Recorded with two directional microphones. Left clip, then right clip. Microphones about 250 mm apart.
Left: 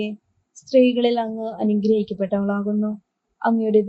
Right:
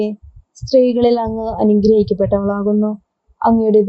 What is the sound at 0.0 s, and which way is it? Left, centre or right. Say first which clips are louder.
Speech: right 8 dB; right.